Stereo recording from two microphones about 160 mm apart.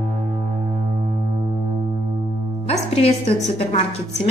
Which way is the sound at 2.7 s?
40° left (ahead or behind).